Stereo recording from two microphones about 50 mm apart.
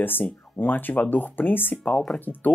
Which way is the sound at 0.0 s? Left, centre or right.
Left.